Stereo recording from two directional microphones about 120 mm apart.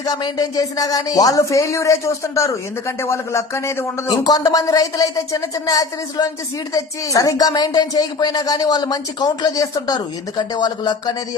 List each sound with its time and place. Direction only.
0.0 s speech: 35° left (ahead or behind)
4.1 s speech: 30° left (ahead or behind)